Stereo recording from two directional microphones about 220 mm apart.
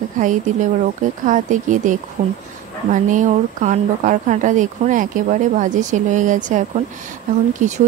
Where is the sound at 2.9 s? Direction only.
35° right (ahead or behind).